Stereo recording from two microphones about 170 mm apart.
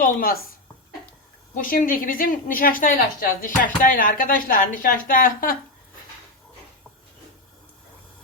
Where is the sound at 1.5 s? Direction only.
55° left (ahead or behind).